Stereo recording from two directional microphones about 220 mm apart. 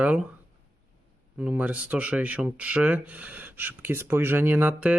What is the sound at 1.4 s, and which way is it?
Speech, 5° right (ahead or behind).